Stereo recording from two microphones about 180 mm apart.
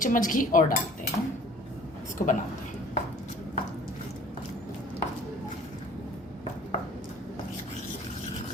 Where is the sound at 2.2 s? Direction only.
45° left (ahead or behind).